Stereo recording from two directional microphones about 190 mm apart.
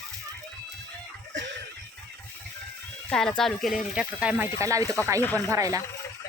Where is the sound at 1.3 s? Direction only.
70° right (ahead or behind).